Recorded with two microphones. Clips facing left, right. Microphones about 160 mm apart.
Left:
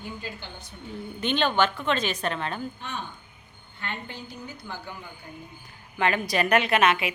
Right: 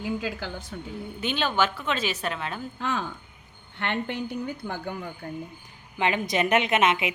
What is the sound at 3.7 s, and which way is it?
A woman's voice, 70° right (ahead or behind).